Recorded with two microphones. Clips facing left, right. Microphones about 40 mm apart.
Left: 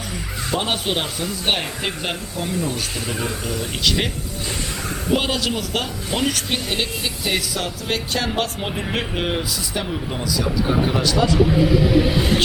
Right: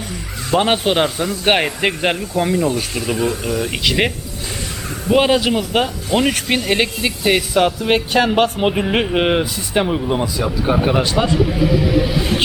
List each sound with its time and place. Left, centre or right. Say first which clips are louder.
0.5 s speech: right 8 dB; right
2.9 s speech: right 6 dB; centre
6.2 s speech: right 5 dB; right
9.8 s speech: right 7 dB; right